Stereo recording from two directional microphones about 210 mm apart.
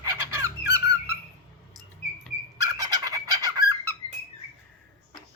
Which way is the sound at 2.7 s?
20° right (ahead or behind).